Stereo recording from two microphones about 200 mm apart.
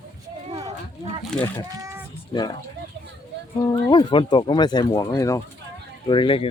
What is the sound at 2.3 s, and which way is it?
Speech, 25° left (ahead or behind).